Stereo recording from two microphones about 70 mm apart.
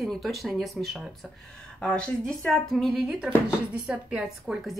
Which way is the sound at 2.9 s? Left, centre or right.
Centre.